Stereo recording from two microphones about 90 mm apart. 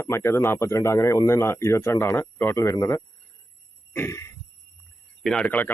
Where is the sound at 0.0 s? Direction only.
30° left (ahead or behind).